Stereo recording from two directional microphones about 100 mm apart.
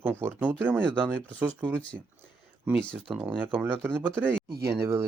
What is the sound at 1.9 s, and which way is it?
Speech, 20° right (ahead or behind).